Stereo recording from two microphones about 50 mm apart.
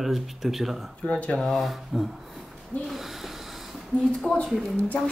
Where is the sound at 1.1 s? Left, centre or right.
Left.